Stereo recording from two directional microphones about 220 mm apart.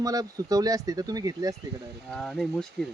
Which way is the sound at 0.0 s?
15° right (ahead or behind).